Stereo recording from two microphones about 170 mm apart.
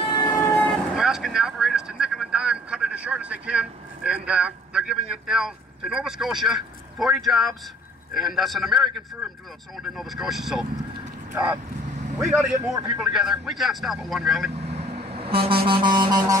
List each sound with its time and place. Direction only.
0.1 s train: 25° left (ahead or behind)
0.9 s vehicle: centre (ahead or behind)
8.1 s speech: centre (ahead or behind)
9.9 s speech: centre (ahead or behind)
12.2 s speech: 5° right (ahead or behind)
14.6 s vehicle: 40° right (ahead or behind); by 16.3 s 25° right (ahead or behind)